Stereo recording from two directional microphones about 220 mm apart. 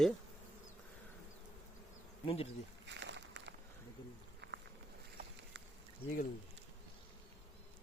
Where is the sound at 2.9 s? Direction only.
55° right (ahead or behind).